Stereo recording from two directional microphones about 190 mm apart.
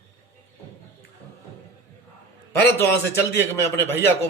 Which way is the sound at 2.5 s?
15° left (ahead or behind).